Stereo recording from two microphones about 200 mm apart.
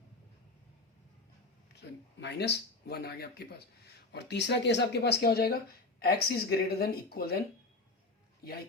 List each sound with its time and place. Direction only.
2.2 s speech: 55° left (ahead or behind)